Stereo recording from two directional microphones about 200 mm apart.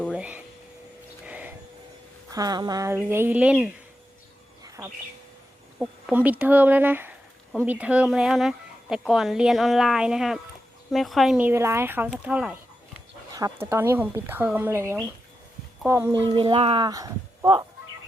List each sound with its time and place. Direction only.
0.0 s a sound: 5° right (ahead or behind)
2.3 s speech: 20° right (ahead or behind)
4.8 s speech: 5° right (ahead or behind)